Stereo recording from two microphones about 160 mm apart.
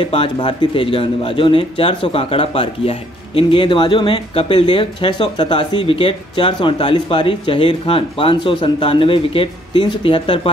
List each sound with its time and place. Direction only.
0.0 s speech: 35° left (ahead or behind)